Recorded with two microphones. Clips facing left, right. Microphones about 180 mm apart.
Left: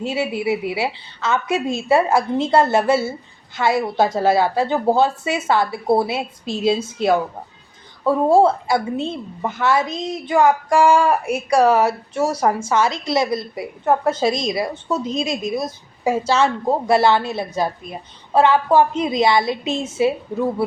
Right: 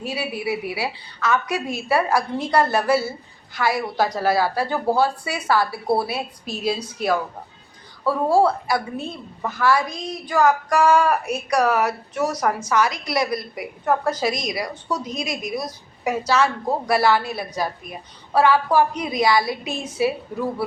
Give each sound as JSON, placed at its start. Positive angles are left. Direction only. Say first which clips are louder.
{"t": 0.0, "sound": "a woman's voice", "louder": "left 5 dB", "side_deg": 25}